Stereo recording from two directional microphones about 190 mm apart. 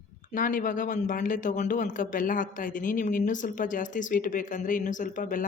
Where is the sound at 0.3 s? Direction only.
45° left (ahead or behind).